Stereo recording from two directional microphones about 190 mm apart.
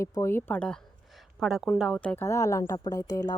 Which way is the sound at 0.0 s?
15° left (ahead or behind).